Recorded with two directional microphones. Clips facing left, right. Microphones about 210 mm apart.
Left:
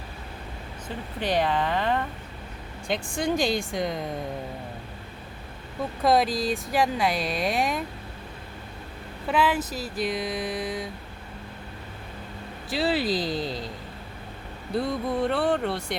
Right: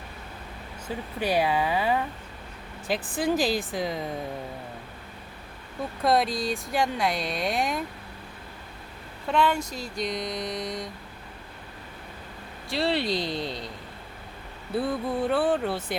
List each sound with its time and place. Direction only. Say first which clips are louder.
0.9 s speech: right 1 dB; 10° right (ahead or behind)
6.0 s speech: left 2 dB; centre (ahead or behind)
9.2 s speech: even; 5° left (ahead or behind)
12.7 s speech: left 1 dB; centre (ahead or behind)
14.7 s speech: left 1 dB; 5° right (ahead or behind)